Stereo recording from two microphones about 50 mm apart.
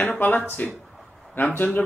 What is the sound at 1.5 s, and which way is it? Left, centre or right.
Speech, left.